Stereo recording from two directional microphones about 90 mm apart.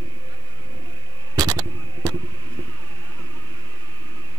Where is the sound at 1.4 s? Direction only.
45° right (ahead or behind).